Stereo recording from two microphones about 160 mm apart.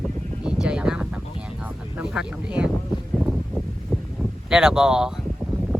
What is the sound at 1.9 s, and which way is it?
Speech, 5° right (ahead or behind).